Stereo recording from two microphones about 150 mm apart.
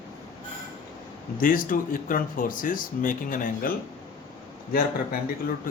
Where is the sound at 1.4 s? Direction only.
65° left (ahead or behind).